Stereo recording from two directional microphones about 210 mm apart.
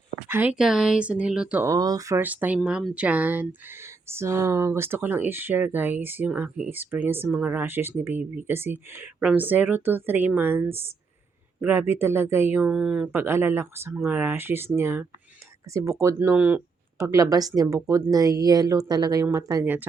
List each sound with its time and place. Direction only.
0.3 s speech: 10° right (ahead or behind)